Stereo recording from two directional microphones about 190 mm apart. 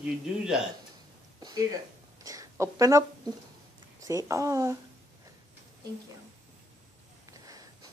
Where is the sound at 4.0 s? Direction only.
15° right (ahead or behind).